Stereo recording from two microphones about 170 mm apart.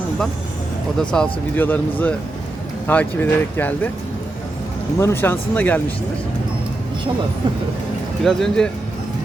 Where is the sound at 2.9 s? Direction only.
10° left (ahead or behind).